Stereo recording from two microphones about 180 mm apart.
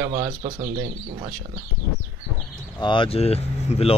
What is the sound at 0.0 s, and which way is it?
Speech, 25° right (ahead or behind).